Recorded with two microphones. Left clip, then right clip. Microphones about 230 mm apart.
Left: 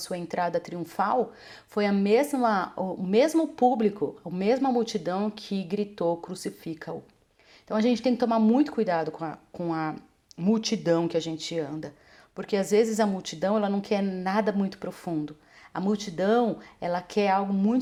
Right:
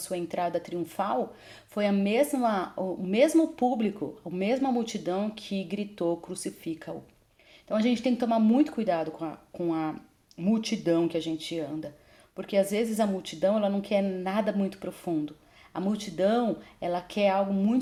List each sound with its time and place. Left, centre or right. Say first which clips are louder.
0.0 s a woman's voice: left 1 dB; left